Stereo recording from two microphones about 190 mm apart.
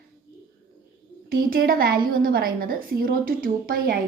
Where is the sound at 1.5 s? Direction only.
50° right (ahead or behind).